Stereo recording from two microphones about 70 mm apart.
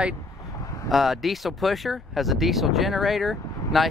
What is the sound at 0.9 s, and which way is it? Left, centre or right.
Speech, centre.